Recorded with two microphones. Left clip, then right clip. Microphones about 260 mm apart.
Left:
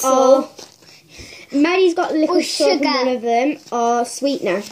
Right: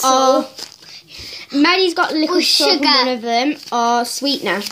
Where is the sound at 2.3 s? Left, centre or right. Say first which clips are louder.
Right 4 dB; centre.